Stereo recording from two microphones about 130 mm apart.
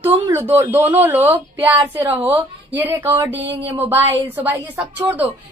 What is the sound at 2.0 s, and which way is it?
Speech, 40° right (ahead or behind).